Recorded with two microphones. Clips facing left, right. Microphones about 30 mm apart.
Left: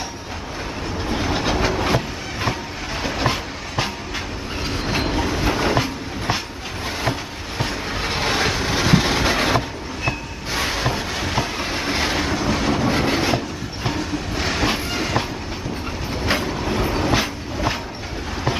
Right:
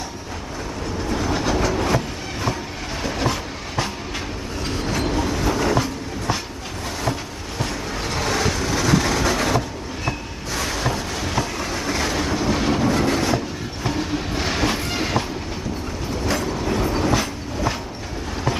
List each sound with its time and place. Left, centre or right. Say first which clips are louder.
0.9 s train: even; left
4.9 s train: left 1 dB; left
12.4 s train: even; centre
12.8 s train: even; left
13.9 s train: right 2 dB; centre
16.1 s train: left 1 dB; left